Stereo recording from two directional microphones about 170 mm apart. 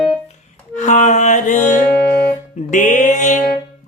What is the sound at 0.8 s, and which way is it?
Music, 45° left (ahead or behind).